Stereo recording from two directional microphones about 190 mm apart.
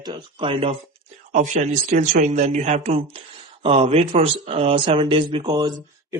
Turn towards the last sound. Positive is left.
turn(degrees=-20)  # may be behind; listen again after turning